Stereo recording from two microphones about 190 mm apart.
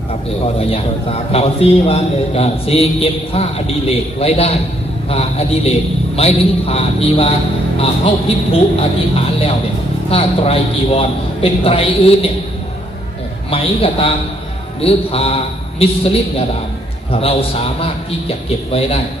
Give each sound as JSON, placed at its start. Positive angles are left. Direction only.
{"t": 0.6, "sound": "a man's voice", "side_deg": 30}
{"t": 13.5, "sound": "a man's voice", "side_deg": 30}